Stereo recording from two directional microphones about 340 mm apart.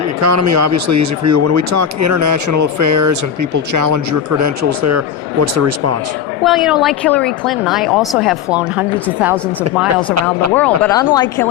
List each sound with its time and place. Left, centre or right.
0.2 s speech: right
6.4 s a woman's voice: centre
10.5 s speech: centre